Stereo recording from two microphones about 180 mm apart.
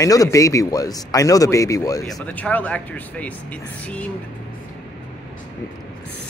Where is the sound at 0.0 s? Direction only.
20° left (ahead or behind).